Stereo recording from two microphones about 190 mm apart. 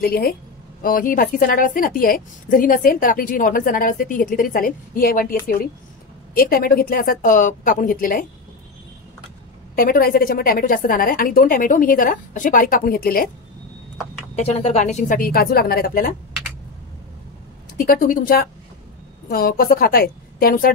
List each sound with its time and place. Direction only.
0.0 s a woman's voice: 55° left (ahead or behind)
6.3 s a woman's voice: 50° left (ahead or behind)
9.8 s a woman's voice: 50° left (ahead or behind)
14.3 s a woman's voice: 35° left (ahead or behind)
17.7 s a woman's voice: 45° left (ahead or behind)